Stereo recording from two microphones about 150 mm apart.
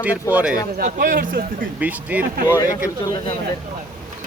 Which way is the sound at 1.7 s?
10° right (ahead or behind).